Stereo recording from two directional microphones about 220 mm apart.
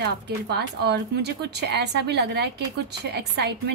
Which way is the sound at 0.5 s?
50° right (ahead or behind).